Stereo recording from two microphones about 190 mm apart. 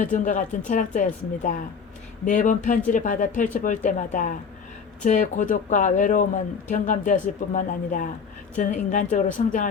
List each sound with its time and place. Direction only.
0.0 s speech: 40° left (ahead or behind)